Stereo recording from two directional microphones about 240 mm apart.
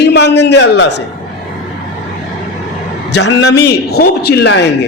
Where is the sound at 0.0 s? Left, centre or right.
Left.